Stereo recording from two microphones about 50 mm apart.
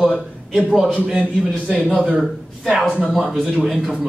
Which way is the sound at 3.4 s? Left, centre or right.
Centre.